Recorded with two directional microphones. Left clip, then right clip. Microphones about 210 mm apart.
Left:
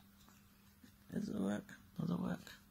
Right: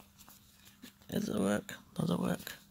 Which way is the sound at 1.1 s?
35° right (ahead or behind).